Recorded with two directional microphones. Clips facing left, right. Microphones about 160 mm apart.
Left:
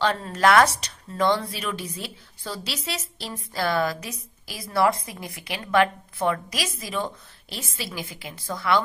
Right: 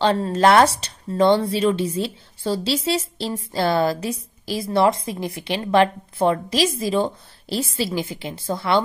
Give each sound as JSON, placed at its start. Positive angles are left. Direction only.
{"t": 0.0, "sound": "speech", "side_deg": -30}